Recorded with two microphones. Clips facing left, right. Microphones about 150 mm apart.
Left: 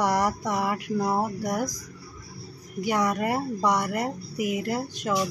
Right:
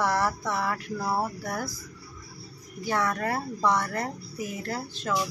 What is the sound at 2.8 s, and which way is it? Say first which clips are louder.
Speech: left 3 dB; 15° left (ahead or behind).